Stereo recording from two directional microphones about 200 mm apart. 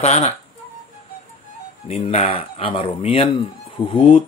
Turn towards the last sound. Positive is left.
turn(degrees=25)  # may be behind; listen again after turning